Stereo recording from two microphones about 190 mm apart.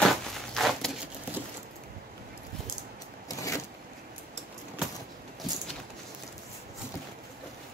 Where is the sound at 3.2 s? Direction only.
15° left (ahead or behind).